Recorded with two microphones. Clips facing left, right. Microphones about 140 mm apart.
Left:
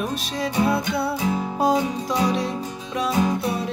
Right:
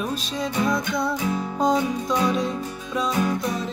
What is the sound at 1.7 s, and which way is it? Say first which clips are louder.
Music: even; 20° left (ahead or behind).